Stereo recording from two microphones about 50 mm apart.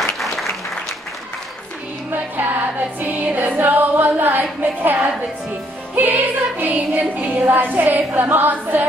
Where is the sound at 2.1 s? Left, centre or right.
Right.